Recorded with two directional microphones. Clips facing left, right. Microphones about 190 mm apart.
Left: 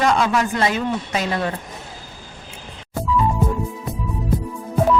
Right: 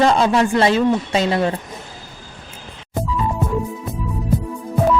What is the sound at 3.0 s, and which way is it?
Music, 20° right (ahead or behind).